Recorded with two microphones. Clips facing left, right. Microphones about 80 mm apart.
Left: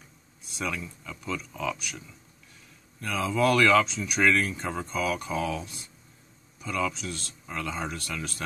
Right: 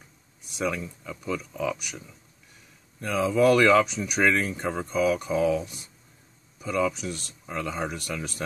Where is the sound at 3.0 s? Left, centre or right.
Right.